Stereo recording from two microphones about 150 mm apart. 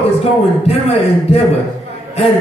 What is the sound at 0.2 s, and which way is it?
A man's voice, 45° left (ahead or behind).